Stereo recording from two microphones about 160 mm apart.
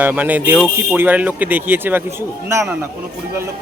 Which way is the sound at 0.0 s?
10° right (ahead or behind).